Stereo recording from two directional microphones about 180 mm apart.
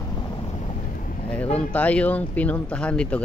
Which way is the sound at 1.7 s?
10° left (ahead or behind).